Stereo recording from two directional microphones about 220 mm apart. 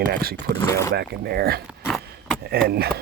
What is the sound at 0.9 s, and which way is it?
Speech, 45° right (ahead or behind).